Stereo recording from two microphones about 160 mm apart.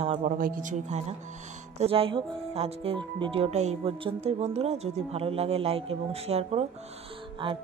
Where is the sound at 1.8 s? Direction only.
35° right (ahead or behind).